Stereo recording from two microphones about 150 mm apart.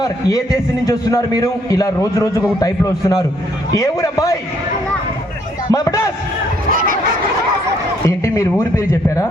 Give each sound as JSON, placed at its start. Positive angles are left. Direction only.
{"t": 0.0, "sound": "a man's voice", "side_deg": 25}
{"t": 3.8, "sound": "a man's voice", "side_deg": 20}
{"t": 5.7, "sound": "a man's voice", "side_deg": 20}
{"t": 6.7, "sound": "fowl", "side_deg": -70}
{"t": 8.0, "sound": "a man's voice", "side_deg": 20}